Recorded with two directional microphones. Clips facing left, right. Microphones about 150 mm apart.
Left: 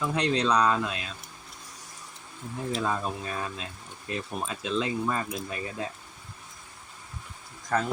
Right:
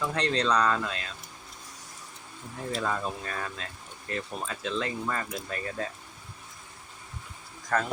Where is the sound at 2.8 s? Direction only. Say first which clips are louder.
Even; 15° left (ahead or behind).